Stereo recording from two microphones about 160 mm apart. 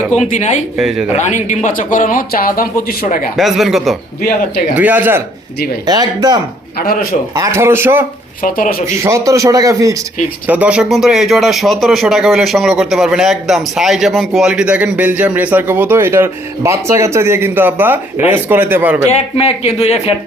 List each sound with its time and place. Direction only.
0.2 s speech: 45° left (ahead or behind)
0.8 s speech: centre (ahead or behind)
1.1 s speech: 45° left (ahead or behind)
3.3 s a man's voice: centre (ahead or behind)
5.8 s speech: 25° right (ahead or behind)
6.7 s speech: 65° left (ahead or behind)
7.3 s a man's voice: 20° right (ahead or behind)
8.4 s speech: 55° left (ahead or behind)
9.0 s speech: 20° right (ahead or behind)
10.4 s a man's voice: 10° right (ahead or behind)
19.0 s speech: 40° left (ahead or behind)